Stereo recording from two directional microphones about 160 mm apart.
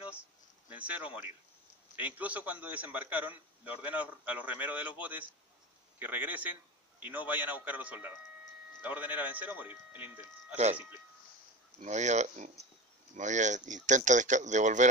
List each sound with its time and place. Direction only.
0.1 s a sound: 10° right (ahead or behind)
2.0 s a man's voice: 10° right (ahead or behind)
11.8 s speech: 45° right (ahead or behind)